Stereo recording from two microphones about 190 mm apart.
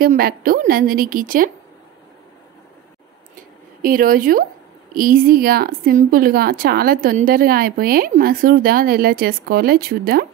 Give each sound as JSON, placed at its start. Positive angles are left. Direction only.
{"t": 0.0, "sound": "a woman's voice", "side_deg": -50}
{"t": 3.8, "sound": "a woman's voice", "side_deg": -50}